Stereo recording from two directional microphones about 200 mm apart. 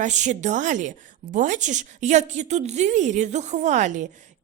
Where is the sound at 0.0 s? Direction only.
35° right (ahead or behind).